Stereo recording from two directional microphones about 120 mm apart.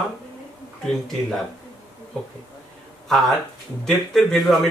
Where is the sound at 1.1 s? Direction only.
Centre (ahead or behind).